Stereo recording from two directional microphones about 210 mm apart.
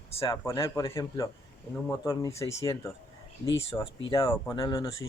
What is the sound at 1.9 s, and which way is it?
Speech, 15° left (ahead or behind).